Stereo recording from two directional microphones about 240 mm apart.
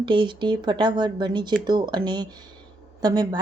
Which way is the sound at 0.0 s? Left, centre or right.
Centre.